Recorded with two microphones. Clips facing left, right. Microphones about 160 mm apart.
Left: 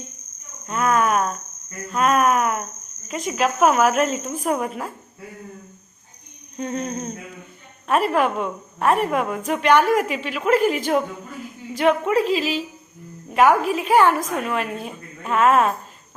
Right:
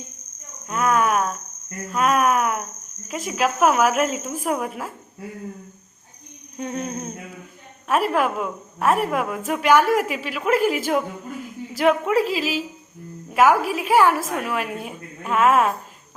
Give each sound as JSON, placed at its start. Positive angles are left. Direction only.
{"t": 0.7, "sound": "cricket", "side_deg": -5}
{"t": 1.9, "sound": "a sound", "side_deg": -5}
{"t": 3.1, "sound": "a woman's voice", "side_deg": -5}
{"t": 6.6, "sound": "a woman's voice", "side_deg": -5}